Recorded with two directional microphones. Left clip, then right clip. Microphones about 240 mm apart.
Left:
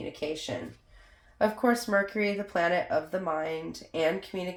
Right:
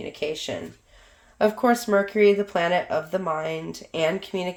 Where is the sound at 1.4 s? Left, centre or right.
Right.